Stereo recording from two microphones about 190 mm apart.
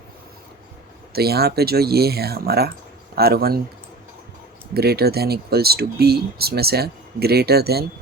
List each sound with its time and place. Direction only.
1.1 s speech: 55° right (ahead or behind)
4.7 s speech: 55° right (ahead or behind)